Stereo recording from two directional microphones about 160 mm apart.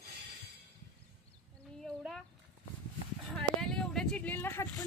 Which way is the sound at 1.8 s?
Centre (ahead or behind).